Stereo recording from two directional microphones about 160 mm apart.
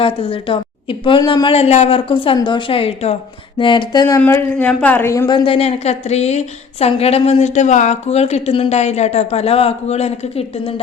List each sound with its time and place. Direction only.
0.0 s a woman's voice: 35° left (ahead or behind)
4.2 s a man's voice: 15° left (ahead or behind)
5.3 s a woman's voice: 35° left (ahead or behind)